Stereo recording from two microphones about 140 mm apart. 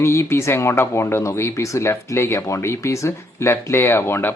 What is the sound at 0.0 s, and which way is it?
Speech, 20° left (ahead or behind).